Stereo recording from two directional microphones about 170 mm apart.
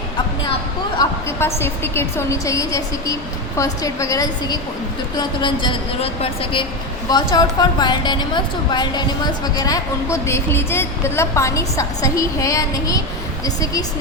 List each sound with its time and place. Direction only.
0.9 s a woman's voice: 15° left (ahead or behind)